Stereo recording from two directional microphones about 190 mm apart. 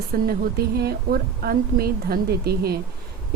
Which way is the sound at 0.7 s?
55° right (ahead or behind).